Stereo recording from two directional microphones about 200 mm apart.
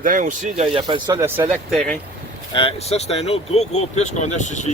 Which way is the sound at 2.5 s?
30° left (ahead or behind).